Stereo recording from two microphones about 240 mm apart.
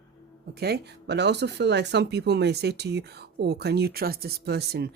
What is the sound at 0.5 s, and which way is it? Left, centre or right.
Speech, right.